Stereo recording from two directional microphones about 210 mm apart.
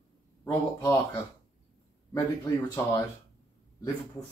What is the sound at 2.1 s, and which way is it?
Speech, 20° left (ahead or behind).